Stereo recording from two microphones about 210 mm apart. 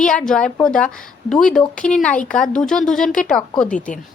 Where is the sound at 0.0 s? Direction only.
5° left (ahead or behind).